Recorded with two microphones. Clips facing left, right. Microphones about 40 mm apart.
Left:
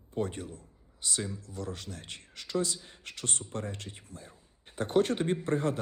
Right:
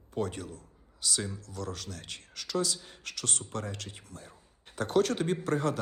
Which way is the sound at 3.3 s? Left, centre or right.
Right.